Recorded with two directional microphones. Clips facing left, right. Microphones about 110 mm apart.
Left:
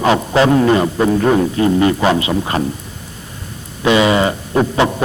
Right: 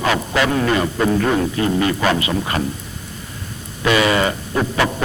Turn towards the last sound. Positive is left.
turn(degrees=25)  # may be behind; listen again after turning